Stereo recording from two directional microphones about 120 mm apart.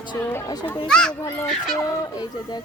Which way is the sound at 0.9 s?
5° left (ahead or behind).